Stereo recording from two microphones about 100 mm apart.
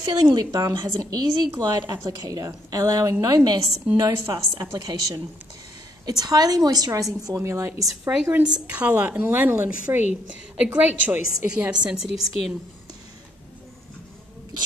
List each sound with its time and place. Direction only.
0.0 s a woman's voice: 40° right (ahead or behind)
8.0 s a woman's voice: 15° right (ahead or behind)